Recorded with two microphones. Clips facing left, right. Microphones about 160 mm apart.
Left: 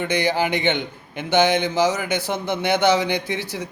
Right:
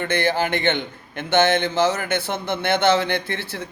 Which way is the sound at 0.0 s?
15° left (ahead or behind).